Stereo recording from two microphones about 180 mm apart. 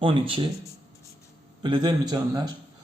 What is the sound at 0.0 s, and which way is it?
Speech, 30° right (ahead or behind).